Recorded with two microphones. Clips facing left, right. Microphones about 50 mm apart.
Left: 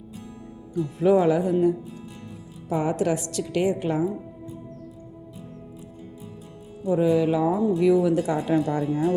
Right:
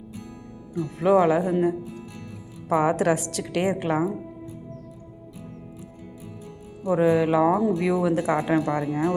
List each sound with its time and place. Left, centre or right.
0.8 s speech: right
2.6 s speech: right
6.8 s speech: right
8.2 s speech: right